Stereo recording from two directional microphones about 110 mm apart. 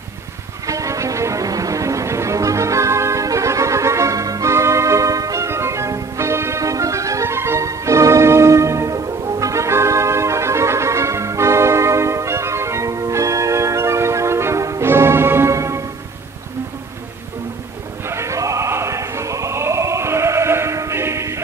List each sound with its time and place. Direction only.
0.7 s music: 30° right (ahead or behind)
18.0 s music: 25° right (ahead or behind)